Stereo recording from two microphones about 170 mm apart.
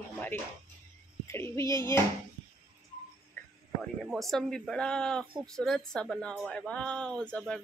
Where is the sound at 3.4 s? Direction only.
15° left (ahead or behind).